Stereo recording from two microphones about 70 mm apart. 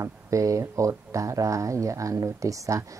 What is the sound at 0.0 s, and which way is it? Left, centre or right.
Speech, right.